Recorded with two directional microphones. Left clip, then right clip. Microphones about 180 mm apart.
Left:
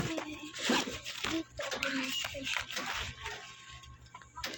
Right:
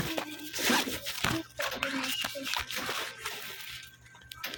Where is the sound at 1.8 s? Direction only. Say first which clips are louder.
Even; centre (ahead or behind).